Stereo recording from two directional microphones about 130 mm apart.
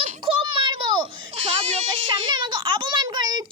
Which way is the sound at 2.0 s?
35° right (ahead or behind).